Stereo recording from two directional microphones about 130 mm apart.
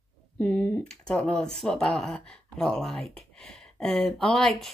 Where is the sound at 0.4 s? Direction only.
10° left (ahead or behind).